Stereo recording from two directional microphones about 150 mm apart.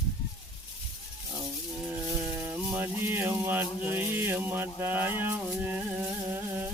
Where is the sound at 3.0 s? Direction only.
15° right (ahead or behind).